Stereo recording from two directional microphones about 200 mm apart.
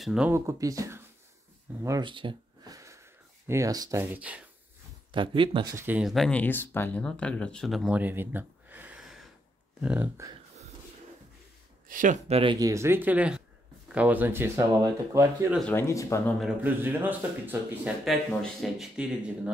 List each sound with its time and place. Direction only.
0.0 s speech: 5° right (ahead or behind)
0.3 s speech: 15° right (ahead or behind)
5.1 s speech: 25° right (ahead or behind)
11.9 s speech: 40° right (ahead or behind); by 14.5 s 10° right (ahead or behind)
15.5 s speech: 5° left (ahead or behind)
16.3 s speech: 5° right (ahead or behind)